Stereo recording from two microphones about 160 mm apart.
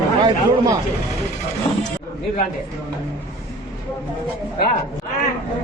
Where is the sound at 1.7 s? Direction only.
35° left (ahead or behind).